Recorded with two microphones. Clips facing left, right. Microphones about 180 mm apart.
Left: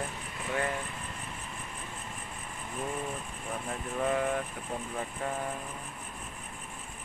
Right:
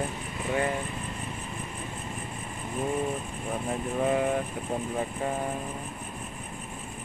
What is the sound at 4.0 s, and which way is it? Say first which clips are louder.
Speech: right 3 dB; 20° right (ahead or behind).